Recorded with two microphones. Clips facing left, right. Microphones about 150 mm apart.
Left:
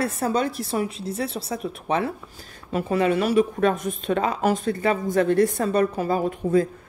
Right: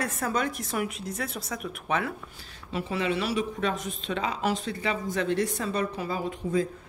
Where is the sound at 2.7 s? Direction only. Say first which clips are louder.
Left 7 dB; 45° left (ahead or behind).